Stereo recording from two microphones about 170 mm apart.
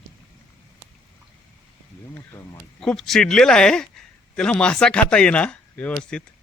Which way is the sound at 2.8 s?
Centre (ahead or behind).